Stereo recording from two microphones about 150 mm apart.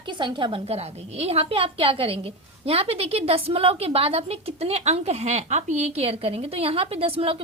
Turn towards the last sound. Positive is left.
turn(degrees=-40)  # may be behind; listen again after turning